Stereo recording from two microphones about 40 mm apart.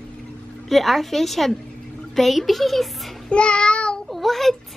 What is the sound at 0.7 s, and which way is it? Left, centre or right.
A woman's voice, centre.